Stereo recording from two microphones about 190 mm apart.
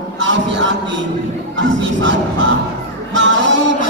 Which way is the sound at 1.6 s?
75° right (ahead or behind).